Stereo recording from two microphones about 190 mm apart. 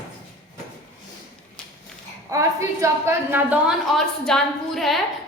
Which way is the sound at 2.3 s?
15° right (ahead or behind).